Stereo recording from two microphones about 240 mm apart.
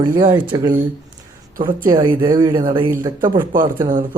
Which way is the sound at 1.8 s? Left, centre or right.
Centre.